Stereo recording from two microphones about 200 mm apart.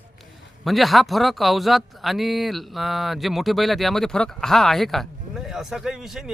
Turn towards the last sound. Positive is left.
turn(degrees=0)  # may be behind; listen again after turning